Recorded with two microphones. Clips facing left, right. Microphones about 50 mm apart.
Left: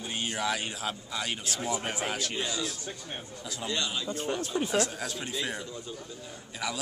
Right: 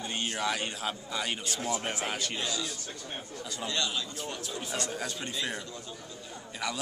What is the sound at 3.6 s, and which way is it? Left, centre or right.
Speech, centre.